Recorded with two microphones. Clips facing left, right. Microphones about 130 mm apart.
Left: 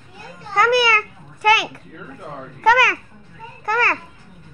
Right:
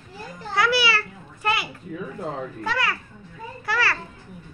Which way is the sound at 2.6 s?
85° left.